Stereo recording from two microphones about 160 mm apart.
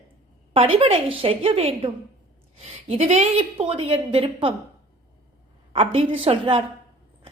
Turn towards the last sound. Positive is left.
turn(degrees=-35)  # may be behind; listen again after turning